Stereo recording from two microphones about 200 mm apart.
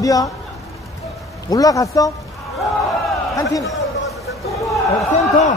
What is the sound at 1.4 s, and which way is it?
Speech, 15° left (ahead or behind).